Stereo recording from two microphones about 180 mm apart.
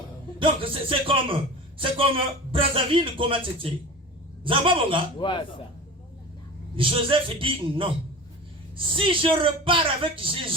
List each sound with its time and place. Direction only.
0.3 s a man's voice: 30° right (ahead or behind)
5.2 s a man's voice: 25° left (ahead or behind)
6.7 s a man's voice: 30° right (ahead or behind)